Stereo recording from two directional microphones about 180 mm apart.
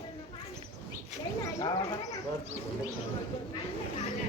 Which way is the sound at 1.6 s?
20° left (ahead or behind).